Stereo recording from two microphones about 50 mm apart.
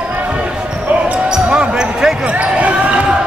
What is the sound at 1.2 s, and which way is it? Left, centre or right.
Basketball bounce, centre.